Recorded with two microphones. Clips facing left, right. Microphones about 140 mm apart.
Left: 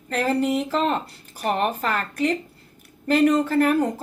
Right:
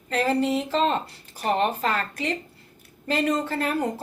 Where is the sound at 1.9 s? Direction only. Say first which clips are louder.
Left 4 dB; 45° left (ahead or behind).